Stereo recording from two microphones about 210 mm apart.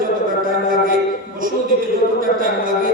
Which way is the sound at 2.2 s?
40° right (ahead or behind).